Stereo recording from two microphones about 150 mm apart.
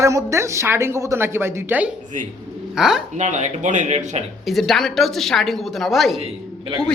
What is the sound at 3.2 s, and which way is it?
Speech, 50° right (ahead or behind).